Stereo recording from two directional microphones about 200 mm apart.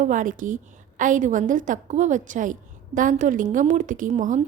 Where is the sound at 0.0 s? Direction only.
40° right (ahead or behind).